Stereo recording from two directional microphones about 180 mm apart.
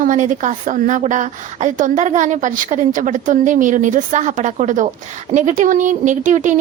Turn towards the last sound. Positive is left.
turn(degrees=-45)  # may be behind; listen again after turning